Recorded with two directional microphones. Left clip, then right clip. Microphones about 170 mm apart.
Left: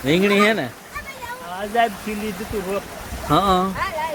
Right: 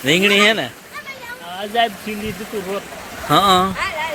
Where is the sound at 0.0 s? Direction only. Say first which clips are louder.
Right 3 dB; 10° left (ahead or behind).